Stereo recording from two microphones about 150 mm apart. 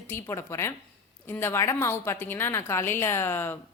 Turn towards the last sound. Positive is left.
turn(degrees=15)  # may be behind; listen again after turning